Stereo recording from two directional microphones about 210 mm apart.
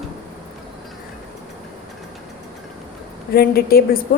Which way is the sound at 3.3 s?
45° left (ahead or behind).